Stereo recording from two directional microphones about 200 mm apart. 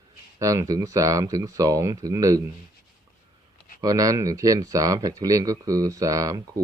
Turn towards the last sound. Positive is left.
turn(degrees=-15)  # may be behind; listen again after turning